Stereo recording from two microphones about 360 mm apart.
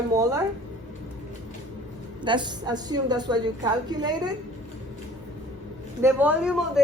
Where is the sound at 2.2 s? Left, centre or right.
Centre.